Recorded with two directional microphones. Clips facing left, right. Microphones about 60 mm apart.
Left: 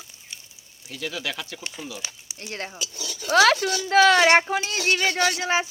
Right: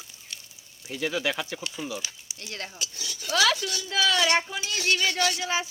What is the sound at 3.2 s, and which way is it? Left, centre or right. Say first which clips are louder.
Speech: left 6 dB; left.